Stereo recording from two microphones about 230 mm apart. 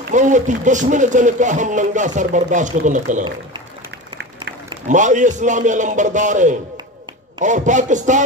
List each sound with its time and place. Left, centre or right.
0.1 s speech: right
4.8 s speech: right